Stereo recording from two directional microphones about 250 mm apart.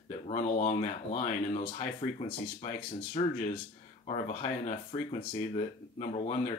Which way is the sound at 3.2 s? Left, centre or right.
Left.